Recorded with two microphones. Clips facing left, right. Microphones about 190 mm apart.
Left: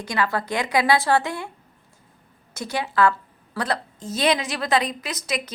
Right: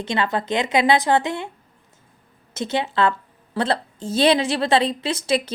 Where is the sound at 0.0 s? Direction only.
25° right (ahead or behind).